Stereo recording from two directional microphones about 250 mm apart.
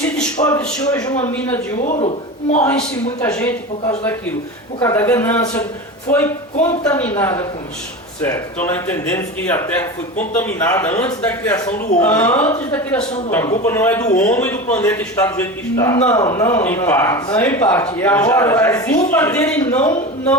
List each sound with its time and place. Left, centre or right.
0.3 s a sound: centre
0.9 s a man's voice: centre
1.8 s a man's voice: left
3.2 s a man's voice: centre